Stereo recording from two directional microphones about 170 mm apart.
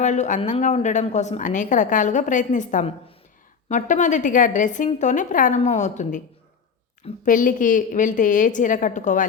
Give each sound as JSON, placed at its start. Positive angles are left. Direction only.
{"t": 0.0, "sound": "a woman's voice", "side_deg": 45}
{"t": 7.3, "sound": "a woman's voice", "side_deg": 50}